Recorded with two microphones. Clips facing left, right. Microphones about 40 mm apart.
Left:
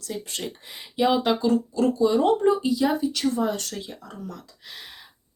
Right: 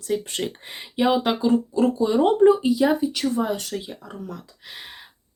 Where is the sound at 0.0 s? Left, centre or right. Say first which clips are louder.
Right 6 dB; right.